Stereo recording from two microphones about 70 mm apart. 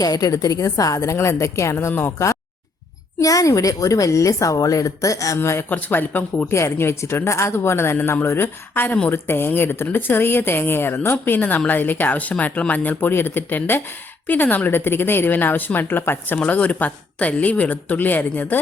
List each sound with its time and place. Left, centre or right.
0.0 s a woman's voice: left
1.9 s speech: left
2.1 s speech: left
3.2 s a woman's voice: left
5.4 s speech: left
6.5 s speech: left
11.3 s speech: left
16.4 s speech: centre